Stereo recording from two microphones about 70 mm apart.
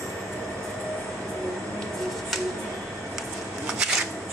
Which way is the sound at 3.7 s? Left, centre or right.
Centre.